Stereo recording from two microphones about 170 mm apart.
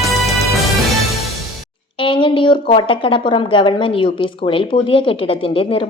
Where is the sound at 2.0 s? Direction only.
30° left (ahead or behind).